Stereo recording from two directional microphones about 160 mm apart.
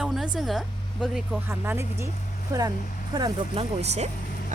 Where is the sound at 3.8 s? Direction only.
45° right (ahead or behind).